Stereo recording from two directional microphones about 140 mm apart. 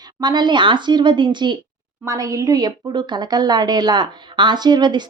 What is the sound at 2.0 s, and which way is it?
A woman's voice, 25° right (ahead or behind).